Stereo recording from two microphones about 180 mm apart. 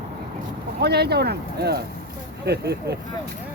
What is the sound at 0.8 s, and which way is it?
Speech, 65° right (ahead or behind).